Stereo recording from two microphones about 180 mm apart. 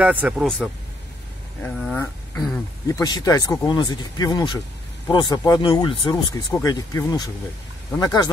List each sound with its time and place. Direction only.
0.0 s speech: 10° right (ahead or behind)
1.6 s speech: 5° left (ahead or behind)
2.9 s speech: 20° left (ahead or behind)